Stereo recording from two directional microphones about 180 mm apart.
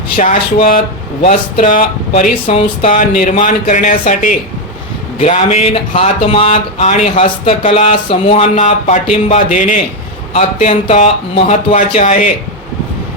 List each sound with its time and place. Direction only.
0.2 s speech: 50° left (ahead or behind)